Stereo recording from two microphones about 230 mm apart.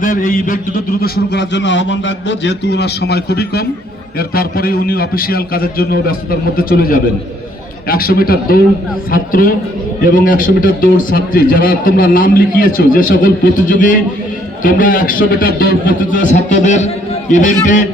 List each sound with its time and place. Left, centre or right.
0.0 s a man's voice: left